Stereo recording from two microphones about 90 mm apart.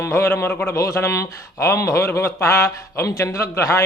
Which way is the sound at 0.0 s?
30° left (ahead or behind).